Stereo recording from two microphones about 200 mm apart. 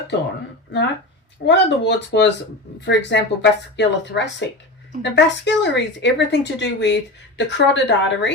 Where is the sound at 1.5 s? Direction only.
60° left (ahead or behind).